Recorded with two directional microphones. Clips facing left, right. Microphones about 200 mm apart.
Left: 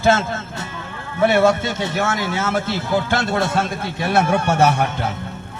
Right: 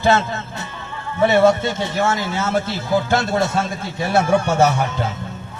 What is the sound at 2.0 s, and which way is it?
Speech, 50° left (ahead or behind).